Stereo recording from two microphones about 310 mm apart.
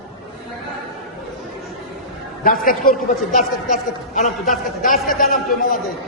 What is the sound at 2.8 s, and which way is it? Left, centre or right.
A man's voice, left.